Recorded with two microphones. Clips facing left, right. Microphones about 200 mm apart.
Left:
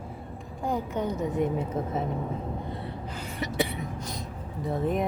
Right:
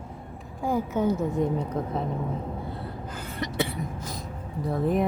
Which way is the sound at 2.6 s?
Centre (ahead or behind).